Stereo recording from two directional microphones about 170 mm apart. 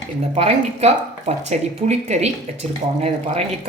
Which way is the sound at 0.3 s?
35° right (ahead or behind).